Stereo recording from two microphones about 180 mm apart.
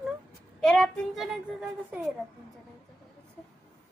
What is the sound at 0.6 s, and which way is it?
A child's voice, 5° left (ahead or behind).